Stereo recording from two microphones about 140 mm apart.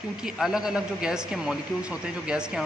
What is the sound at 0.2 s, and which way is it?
A man's voice, 5° right (ahead or behind).